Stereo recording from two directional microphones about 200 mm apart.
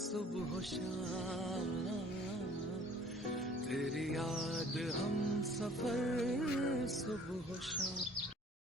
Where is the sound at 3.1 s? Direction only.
Centre (ahead or behind).